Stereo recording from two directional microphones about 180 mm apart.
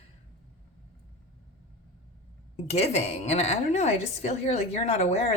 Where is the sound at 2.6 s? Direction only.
40° left (ahead or behind).